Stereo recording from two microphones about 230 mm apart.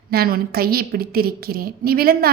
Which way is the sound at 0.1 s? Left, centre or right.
Right.